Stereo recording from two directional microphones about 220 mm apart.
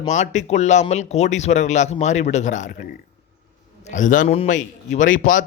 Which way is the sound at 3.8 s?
35° left (ahead or behind).